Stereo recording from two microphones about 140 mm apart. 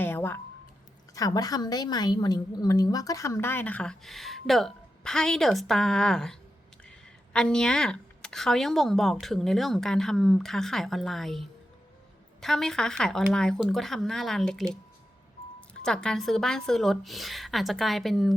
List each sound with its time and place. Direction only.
0.0 s a sound: 15° left (ahead or behind)
1.1 s a woman's voice: 25° left (ahead or behind); by 6.3 s 5° left (ahead or behind)
7.3 s speech: 5° left (ahead or behind)
15.8 s speech: 5° left (ahead or behind)